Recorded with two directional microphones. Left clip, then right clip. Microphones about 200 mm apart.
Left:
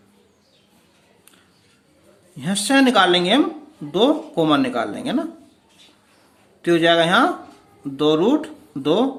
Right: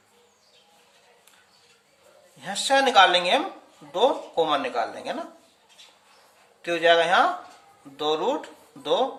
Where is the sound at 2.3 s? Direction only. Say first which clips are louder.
Left 3 dB; 25° left (ahead or behind).